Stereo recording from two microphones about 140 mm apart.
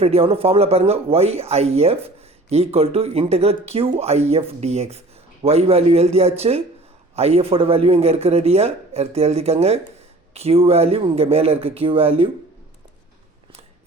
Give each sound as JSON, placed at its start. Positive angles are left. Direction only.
{"t": 0.0, "sound": "speech", "side_deg": -45}